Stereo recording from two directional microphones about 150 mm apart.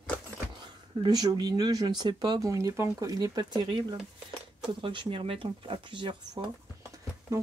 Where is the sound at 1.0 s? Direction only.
25° right (ahead or behind).